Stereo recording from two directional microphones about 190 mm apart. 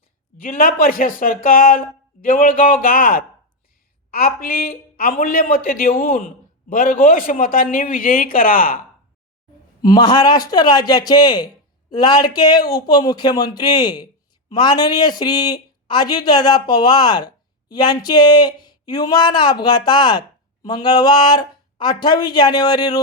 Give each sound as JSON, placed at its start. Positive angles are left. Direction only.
{"t": 0.3, "sound": "a man's voice", "side_deg": 45}
{"t": 9.8, "sound": "speech", "side_deg": 20}